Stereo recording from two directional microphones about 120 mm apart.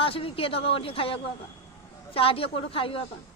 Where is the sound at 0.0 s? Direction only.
50° left (ahead or behind).